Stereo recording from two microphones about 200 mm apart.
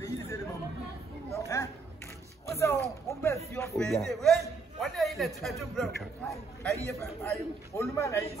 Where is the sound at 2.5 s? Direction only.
15° left (ahead or behind).